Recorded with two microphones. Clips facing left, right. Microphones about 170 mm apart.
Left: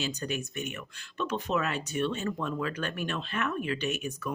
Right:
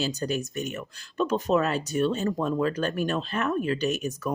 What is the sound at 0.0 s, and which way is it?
Speech, 40° right (ahead or behind).